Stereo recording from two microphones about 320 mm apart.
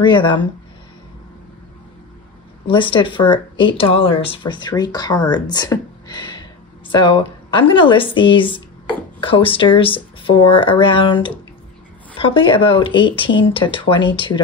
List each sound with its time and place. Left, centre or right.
0.0 s speech: centre
2.6 s speech: centre